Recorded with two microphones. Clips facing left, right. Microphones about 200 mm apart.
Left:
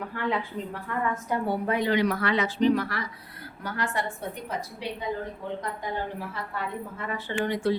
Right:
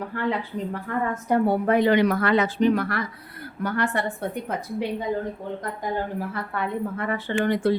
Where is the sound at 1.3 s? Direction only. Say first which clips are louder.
Right 9 dB; 55° right (ahead or behind).